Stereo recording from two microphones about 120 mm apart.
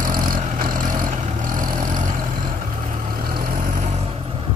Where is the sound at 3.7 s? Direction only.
70° right (ahead or behind).